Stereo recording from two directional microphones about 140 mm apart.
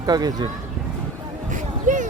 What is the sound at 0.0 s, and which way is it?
Speech, 25° right (ahead or behind).